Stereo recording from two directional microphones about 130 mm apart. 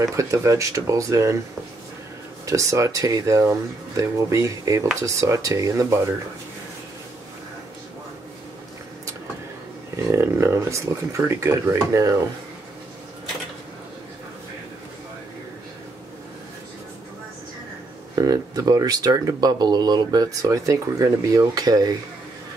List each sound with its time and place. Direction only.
0.0 s speech: 25° right (ahead or behind)
2.4 s speech: 25° right (ahead or behind)
10.1 s speech: 20° right (ahead or behind)
18.1 s speech: 30° right (ahead or behind)